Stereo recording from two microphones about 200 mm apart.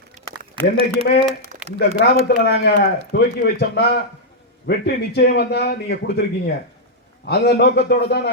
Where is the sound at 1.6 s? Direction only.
30° right (ahead or behind).